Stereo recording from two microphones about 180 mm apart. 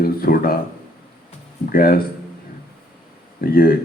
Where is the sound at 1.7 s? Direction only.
55° left (ahead or behind).